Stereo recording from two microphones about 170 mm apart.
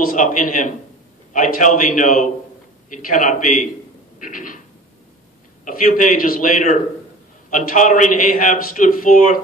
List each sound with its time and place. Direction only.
0.0 s a man's voice: 55° left (ahead or behind)
5.7 s a man's voice: 55° left (ahead or behind)